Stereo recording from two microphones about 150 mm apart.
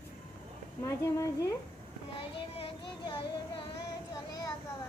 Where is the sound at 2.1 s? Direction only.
35° left (ahead or behind).